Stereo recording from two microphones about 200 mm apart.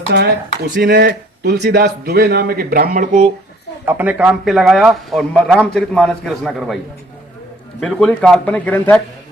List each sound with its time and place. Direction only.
0.1 s a man's voice: 55° right (ahead or behind)
3.8 s a man's voice: 10° right (ahead or behind)
7.8 s a man's voice: 5° left (ahead or behind)